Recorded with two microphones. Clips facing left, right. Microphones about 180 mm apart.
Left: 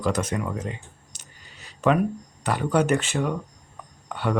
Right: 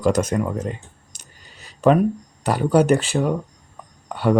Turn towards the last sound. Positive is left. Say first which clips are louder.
# right 7 dB
turn(degrees=-40)  # may be behind; listen again after turning